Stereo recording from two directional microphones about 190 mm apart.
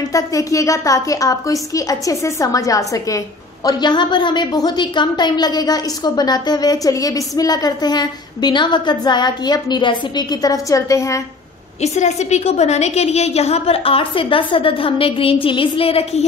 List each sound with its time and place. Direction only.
0.1 s a woman's voice: 15° left (ahead or behind)
11.8 s a woman's voice: 35° left (ahead or behind)